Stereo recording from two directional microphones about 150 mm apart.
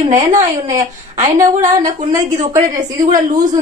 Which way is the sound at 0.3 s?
55° right (ahead or behind).